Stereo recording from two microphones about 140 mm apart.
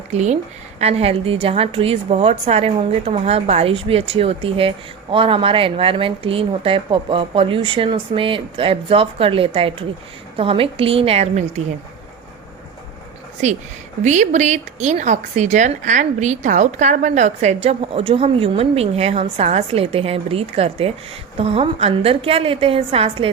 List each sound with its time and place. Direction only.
0.1 s a woman's voice: 55° right (ahead or behind)
14.0 s a woman's voice: 60° right (ahead or behind); by 23.3 s 45° right (ahead or behind)